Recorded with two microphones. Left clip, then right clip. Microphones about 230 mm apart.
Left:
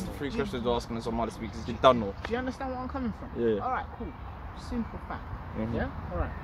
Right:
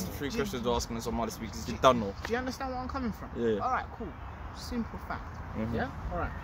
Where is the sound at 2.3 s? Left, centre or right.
Right.